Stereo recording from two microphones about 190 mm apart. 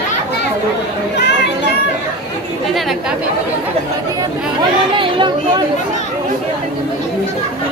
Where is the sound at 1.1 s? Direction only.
65° left (ahead or behind).